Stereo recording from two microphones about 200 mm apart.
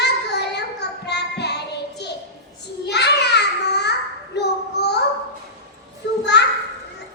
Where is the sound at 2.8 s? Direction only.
55° left (ahead or behind).